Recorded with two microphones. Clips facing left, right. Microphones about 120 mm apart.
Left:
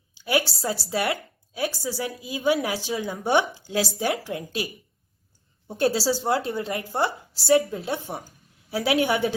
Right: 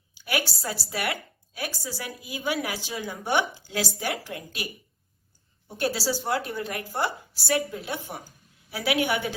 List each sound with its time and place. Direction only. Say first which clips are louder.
0.1 s a woman's voice: left 5 dB; 25° left (ahead or behind)
5.6 s a woman's voice: left 5 dB; 30° left (ahead or behind)